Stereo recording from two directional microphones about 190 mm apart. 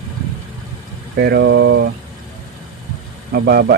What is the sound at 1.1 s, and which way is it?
Speech, 60° right (ahead or behind).